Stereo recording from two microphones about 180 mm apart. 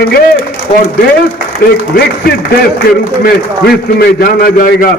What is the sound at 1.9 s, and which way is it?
Speech, 50° left (ahead or behind).